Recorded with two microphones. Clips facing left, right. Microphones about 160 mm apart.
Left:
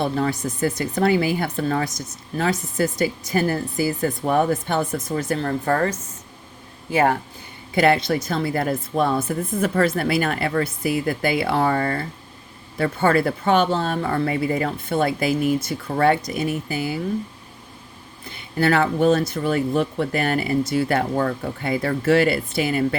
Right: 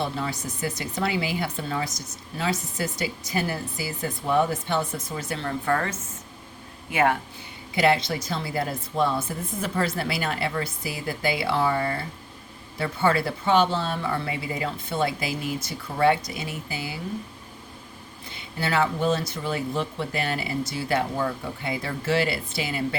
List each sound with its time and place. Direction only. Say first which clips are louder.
0.0 s speech: left 7 dB; 50° left (ahead or behind)
6.9 s speech: left 3 dB; 35° left (ahead or behind)
7.8 s speech: left 4 dB; 55° left (ahead or behind)
18.5 s speech: left 6 dB; 55° left (ahead or behind)